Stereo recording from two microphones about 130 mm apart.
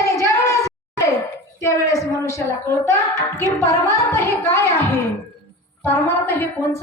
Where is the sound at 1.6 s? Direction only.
25° left (ahead or behind).